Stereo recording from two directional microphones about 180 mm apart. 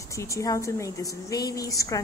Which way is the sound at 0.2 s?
15° left (ahead or behind).